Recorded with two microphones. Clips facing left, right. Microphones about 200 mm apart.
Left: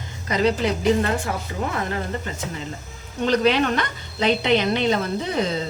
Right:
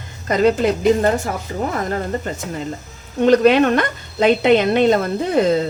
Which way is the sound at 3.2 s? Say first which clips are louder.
Right 7 dB; 50° right (ahead or behind).